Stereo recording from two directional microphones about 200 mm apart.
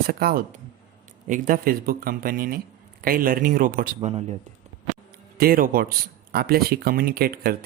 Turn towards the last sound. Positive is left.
turn(degrees=-50)  # may be behind; listen again after turning